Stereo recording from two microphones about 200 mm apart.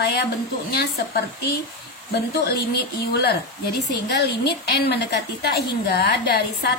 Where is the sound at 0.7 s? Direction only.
55° left (ahead or behind).